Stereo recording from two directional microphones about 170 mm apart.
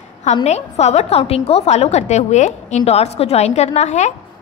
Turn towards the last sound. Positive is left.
turn(degrees=45)  # may be behind; listen again after turning